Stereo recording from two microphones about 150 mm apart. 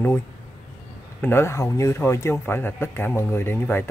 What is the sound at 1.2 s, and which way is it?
Speech, 15° left (ahead or behind).